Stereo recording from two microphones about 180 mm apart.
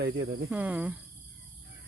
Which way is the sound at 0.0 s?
65° right (ahead or behind).